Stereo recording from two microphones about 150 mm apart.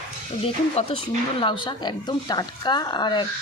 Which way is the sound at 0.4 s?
40° left (ahead or behind).